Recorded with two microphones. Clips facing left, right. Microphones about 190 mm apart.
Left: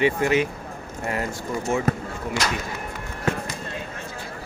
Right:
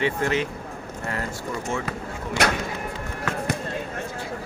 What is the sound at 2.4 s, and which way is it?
Speech, 65° right (ahead or behind).